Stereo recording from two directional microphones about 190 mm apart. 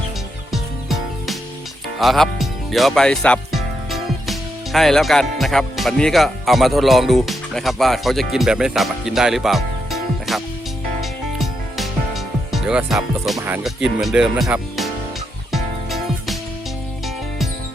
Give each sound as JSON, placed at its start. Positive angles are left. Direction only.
{"t": 0.5, "sound": "music", "side_deg": 0}
{"t": 2.0, "sound": "speech", "side_deg": 0}
{"t": 11.3, "sound": "music", "side_deg": 0}
{"t": 13.4, "sound": "speech", "side_deg": -5}
{"t": 15.5, "sound": "music", "side_deg": 0}